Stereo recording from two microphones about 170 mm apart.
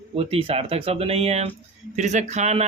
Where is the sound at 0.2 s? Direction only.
35° right (ahead or behind).